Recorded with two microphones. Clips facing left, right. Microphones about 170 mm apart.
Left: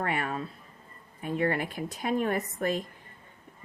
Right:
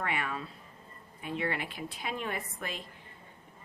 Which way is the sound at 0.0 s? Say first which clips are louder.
Left 4 dB; 40° left (ahead or behind).